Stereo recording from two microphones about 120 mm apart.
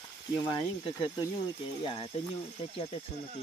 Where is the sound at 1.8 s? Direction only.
50° left (ahead or behind).